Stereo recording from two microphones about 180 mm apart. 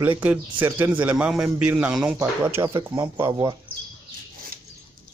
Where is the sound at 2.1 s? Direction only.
15° right (ahead or behind).